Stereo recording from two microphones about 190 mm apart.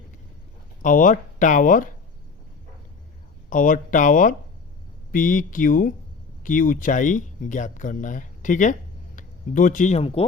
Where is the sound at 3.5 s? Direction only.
45° left (ahead or behind).